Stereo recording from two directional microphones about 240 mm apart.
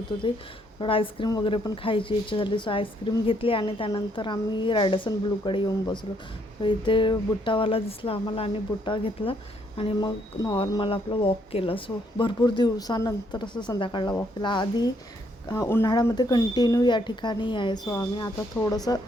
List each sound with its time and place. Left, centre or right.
0.8 s a woman's voice: left